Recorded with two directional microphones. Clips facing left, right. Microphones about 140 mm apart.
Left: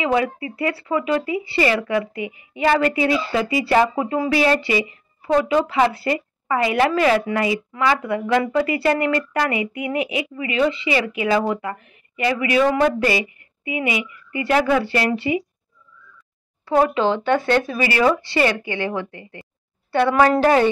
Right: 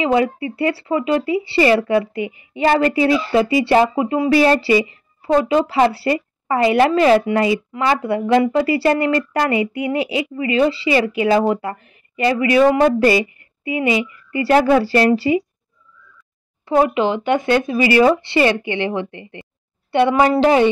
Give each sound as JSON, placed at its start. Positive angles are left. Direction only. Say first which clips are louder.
{"t": 0.0, "sound": "speech", "louder": "right 3 dB", "side_deg": -30}
{"t": 4.3, "sound": "a woman's voice", "louder": "right 6 dB", "side_deg": -35}
{"t": 16.6, "sound": "speech", "louder": "right 2 dB", "side_deg": -15}